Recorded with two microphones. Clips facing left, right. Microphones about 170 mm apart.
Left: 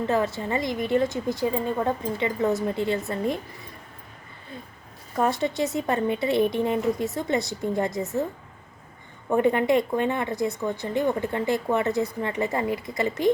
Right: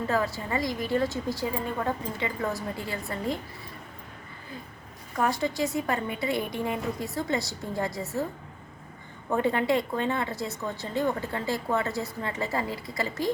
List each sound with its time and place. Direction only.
0.1 s speech: 25° left (ahead or behind)
5.1 s speech: 25° left (ahead or behind)
9.3 s speech: 20° left (ahead or behind)